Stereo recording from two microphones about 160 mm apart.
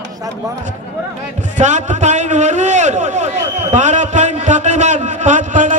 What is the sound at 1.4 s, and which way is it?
A man's voice, 50° right (ahead or behind).